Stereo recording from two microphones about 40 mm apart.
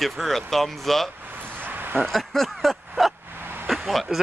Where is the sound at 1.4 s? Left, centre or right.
Right.